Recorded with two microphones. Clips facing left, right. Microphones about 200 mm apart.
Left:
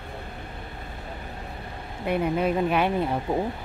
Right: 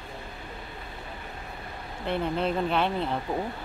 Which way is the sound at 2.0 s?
10° left (ahead or behind).